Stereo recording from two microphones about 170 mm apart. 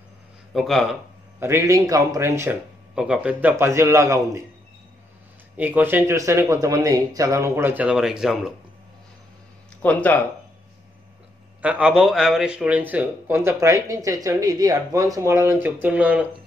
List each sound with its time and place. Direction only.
0.5 s speech: centre (ahead or behind)
1.4 s speech: 15° right (ahead or behind)
2.9 s speech: 5° right (ahead or behind)
5.6 s speech: 10° right (ahead or behind)
9.8 s speech: 10° left (ahead or behind)
11.6 s speech: 5° right (ahead or behind)